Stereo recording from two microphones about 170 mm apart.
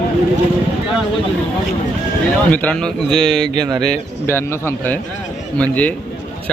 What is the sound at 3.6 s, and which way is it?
Speech, 25° right (ahead or behind).